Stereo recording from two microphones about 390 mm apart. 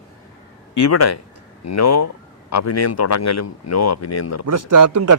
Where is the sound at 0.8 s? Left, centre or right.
Left.